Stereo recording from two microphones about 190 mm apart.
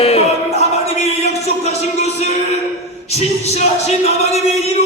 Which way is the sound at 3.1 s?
35° left (ahead or behind).